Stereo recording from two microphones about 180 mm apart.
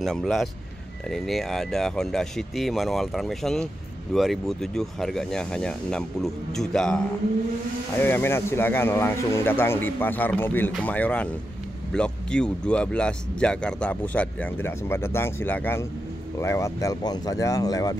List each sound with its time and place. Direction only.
0.0 s speech: centre (ahead or behind)
8.0 s speech: 10° left (ahead or behind)